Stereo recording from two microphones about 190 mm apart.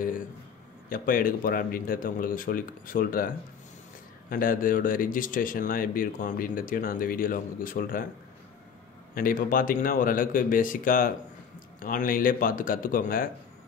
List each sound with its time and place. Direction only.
0.8 s speech: 50° left (ahead or behind)
4.3 s speech: 45° left (ahead or behind)
9.1 s speech: 45° left (ahead or behind)